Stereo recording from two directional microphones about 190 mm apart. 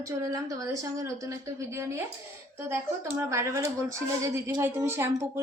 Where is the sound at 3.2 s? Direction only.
15° right (ahead or behind).